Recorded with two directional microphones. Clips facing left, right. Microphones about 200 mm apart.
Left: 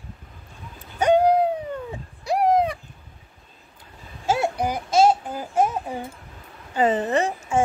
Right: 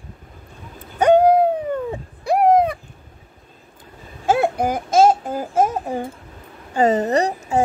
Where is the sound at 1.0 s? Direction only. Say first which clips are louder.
Right 4 dB; 55° right (ahead or behind).